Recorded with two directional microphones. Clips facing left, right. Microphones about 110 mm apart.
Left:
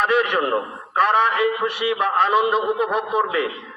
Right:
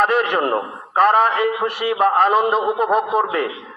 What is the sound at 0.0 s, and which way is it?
A man's voice, 40° right (ahead or behind).